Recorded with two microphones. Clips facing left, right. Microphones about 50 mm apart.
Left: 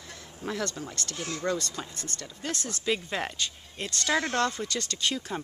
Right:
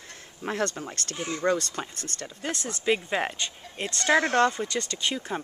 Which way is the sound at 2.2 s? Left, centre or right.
Right.